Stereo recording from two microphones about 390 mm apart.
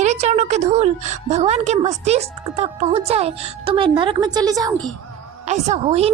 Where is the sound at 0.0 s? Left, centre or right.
Centre.